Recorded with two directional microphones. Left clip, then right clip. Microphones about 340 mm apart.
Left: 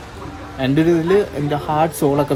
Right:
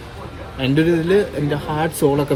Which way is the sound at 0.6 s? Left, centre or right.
Left.